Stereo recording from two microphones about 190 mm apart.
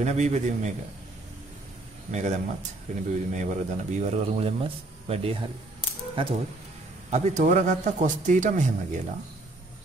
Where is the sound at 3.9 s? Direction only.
35° right (ahead or behind).